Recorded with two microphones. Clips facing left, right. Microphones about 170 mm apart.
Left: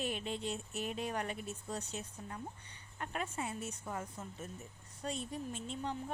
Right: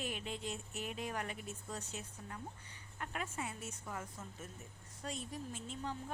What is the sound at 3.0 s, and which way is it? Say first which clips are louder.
A woman's voice: left 3 dB; 35° left (ahead or behind).